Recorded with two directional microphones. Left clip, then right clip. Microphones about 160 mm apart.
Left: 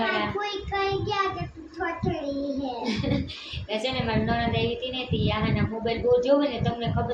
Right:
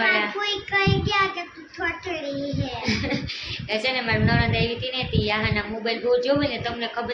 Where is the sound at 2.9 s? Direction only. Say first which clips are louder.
Right 3 dB; 5° right (ahead or behind).